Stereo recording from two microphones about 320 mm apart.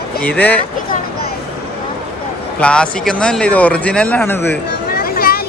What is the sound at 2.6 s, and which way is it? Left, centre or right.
Speech, centre.